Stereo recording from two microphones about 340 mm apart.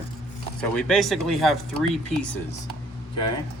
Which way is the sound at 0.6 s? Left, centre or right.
Centre.